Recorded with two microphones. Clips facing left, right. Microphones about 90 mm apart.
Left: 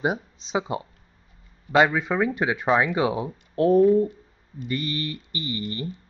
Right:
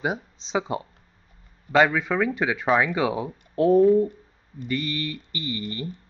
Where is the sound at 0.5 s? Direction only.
15° left (ahead or behind).